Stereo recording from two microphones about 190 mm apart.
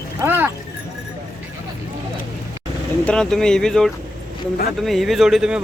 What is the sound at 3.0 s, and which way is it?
Speech, 5° left (ahead or behind).